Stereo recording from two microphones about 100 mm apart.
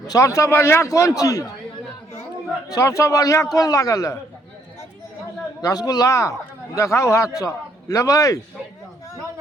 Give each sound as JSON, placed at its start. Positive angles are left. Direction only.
{"t": 0.1, "sound": "a man's voice", "side_deg": 35}
{"t": 2.6, "sound": "a man's voice", "side_deg": 35}
{"t": 5.6, "sound": "a man's voice", "side_deg": 40}